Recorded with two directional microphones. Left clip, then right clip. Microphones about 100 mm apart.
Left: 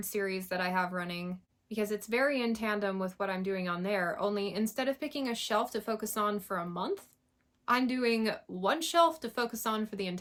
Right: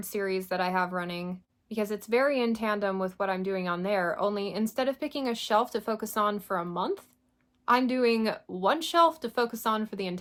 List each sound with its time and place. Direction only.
0.0 s speech: 30° right (ahead or behind)